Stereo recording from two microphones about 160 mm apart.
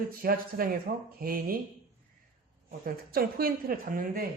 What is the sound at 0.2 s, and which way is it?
Speech, 65° right (ahead or behind).